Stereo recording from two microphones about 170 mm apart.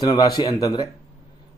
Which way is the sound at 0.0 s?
20° left (ahead or behind).